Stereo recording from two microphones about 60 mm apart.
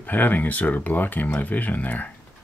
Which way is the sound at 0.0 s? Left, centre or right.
Left.